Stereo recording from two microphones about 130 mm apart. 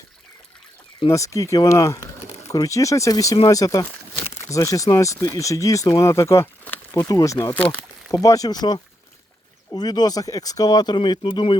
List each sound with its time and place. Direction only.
1.1 s speech: 25° left (ahead or behind)
7.5 s speech: 10° left (ahead or behind)
8.1 s speech: 25° left (ahead or behind)